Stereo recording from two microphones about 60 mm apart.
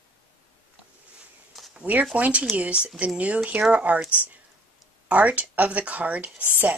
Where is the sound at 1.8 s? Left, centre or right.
Right.